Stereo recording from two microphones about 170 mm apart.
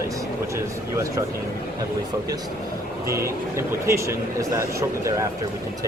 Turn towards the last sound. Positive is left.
turn(degrees=-15)  # may be behind; listen again after turning